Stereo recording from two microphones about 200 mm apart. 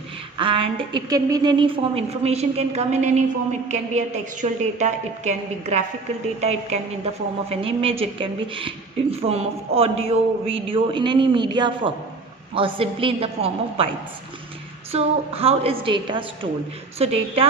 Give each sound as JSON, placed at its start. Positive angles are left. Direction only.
{"t": 0.3, "sound": "a woman's voice", "side_deg": -25}
{"t": 14.9, "sound": "speech", "side_deg": -30}